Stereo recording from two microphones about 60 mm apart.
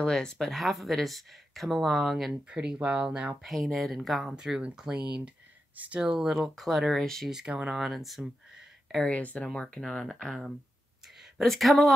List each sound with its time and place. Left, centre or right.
0.0 s speech: centre
0.6 s speech: centre
2.5 s speech: centre
3.4 s speech: centre
4.4 s speech: centre
7.2 s speech: centre
9.1 s speech: left
9.5 s speech: centre
11.3 s speech: centre